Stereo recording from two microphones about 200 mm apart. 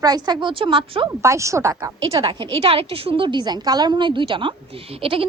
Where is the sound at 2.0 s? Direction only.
25° right (ahead or behind).